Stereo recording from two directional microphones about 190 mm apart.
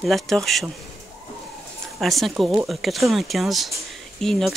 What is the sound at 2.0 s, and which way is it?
Speech, centre (ahead or behind).